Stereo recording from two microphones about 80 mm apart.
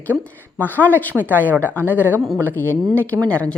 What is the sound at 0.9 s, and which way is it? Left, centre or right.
Speech, right.